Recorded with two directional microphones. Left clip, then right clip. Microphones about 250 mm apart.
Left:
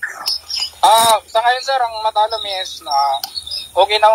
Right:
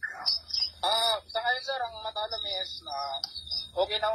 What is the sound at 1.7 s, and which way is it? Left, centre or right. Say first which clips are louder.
Speech: left 16 dB; left.